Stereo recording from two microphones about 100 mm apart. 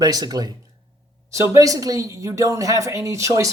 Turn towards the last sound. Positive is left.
turn(degrees=-30)  # may be behind; listen again after turning